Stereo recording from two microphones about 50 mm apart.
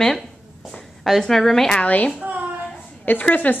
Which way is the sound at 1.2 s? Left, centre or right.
Centre.